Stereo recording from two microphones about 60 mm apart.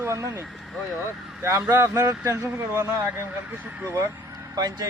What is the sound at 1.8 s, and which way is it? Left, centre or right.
Speech, right.